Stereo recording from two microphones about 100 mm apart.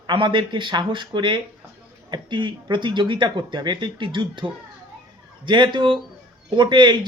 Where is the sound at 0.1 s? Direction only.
55° right (ahead or behind).